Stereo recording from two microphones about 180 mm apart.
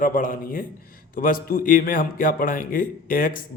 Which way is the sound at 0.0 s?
50° left (ahead or behind).